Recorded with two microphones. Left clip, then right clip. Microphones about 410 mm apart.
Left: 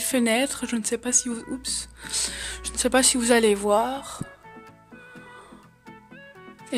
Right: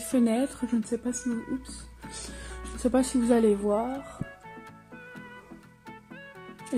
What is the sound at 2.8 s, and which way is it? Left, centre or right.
Speech, left.